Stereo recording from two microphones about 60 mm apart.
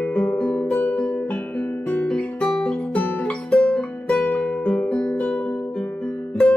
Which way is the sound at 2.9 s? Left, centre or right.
Left.